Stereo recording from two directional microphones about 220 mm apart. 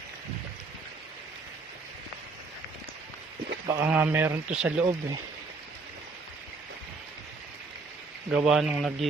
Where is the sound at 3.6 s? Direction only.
10° right (ahead or behind).